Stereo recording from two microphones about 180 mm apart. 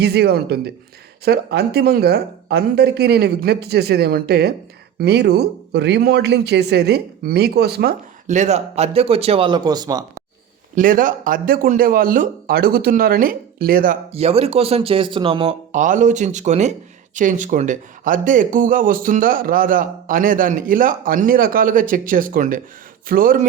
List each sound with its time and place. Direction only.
0.0 s speech: 65° right (ahead or behind)
8.3 s speech: 40° right (ahead or behind); by 10.2 s 20° right (ahead or behind)
10.8 s speech: 50° right (ahead or behind)
14.1 s speech: 35° right (ahead or behind)
15.7 s speech: 45° right (ahead or behind)